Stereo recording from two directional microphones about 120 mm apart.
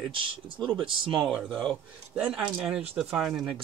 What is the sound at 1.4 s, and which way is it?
Speech, 5° left (ahead or behind).